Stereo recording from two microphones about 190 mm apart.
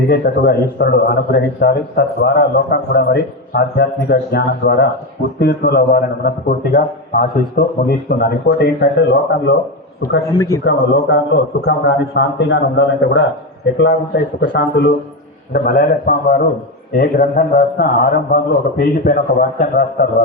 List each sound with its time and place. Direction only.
0.1 s a man's voice: 55° left (ahead or behind)
10.3 s speech: 20° left (ahead or behind)
10.6 s a man's voice: 65° left (ahead or behind)
15.5 s a man's voice: 50° left (ahead or behind)